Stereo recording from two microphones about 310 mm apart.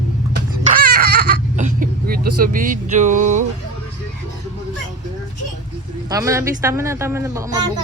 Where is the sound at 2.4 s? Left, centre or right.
Right.